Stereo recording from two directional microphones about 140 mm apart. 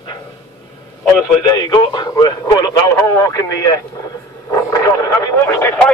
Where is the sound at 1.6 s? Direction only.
30° left (ahead or behind).